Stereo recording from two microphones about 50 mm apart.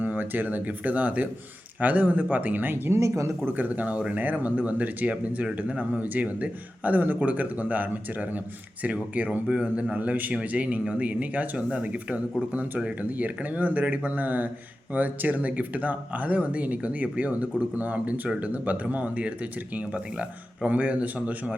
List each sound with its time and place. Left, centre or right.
0.0 s speech: right
2.9 s speech: right
3.4 s speech: right